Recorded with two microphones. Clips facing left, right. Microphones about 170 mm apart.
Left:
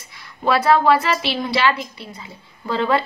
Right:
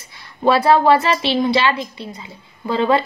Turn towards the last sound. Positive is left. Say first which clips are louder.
# right 3 dB
turn(degrees=-20)  # may be behind; listen again after turning